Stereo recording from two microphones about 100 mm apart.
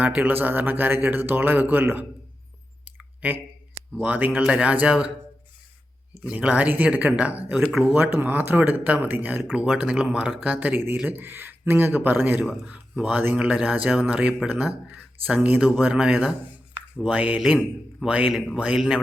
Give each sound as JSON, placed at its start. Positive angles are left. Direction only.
{"t": 0.0, "sound": "speech", "side_deg": -15}
{"t": 2.8, "sound": "clicking", "side_deg": -15}
{"t": 3.9, "sound": "speech", "side_deg": -15}
{"t": 6.2, "sound": "speech", "side_deg": -10}
{"t": 18.3, "sound": "speech", "side_deg": 5}
{"t": 18.5, "sound": "speech", "side_deg": -10}